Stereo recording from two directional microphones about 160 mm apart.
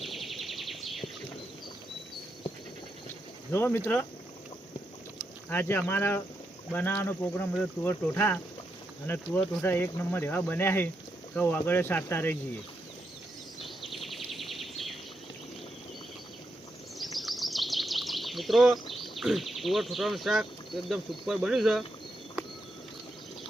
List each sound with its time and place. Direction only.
0.0 s bird: centre (ahead or behind)
3.5 s speech: 15° left (ahead or behind)
5.5 s speech: 15° left (ahead or behind)
13.8 s bird: centre (ahead or behind)
17.0 s bird vocalization: centre (ahead or behind)